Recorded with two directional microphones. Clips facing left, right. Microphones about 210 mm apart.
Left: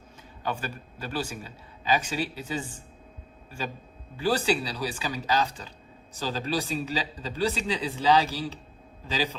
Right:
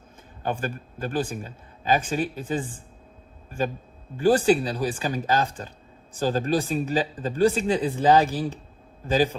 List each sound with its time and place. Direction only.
0.4 s speech: 50° right (ahead or behind)